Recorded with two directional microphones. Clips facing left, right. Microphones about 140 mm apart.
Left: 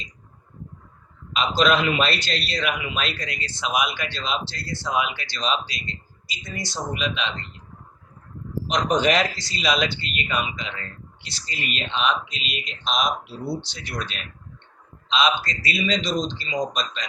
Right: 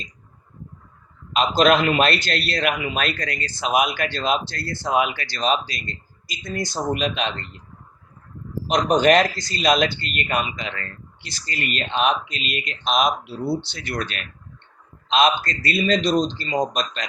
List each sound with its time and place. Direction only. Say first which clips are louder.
1.4 s a man's voice: right 3 dB; 50° right (ahead or behind)
8.7 s a man's voice: right 4 dB; 45° right (ahead or behind)
15.1 s a man's voice: right 4 dB; 50° right (ahead or behind)